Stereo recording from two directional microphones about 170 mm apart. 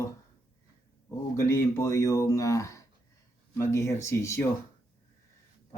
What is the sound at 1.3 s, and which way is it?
Speech, 15° left (ahead or behind).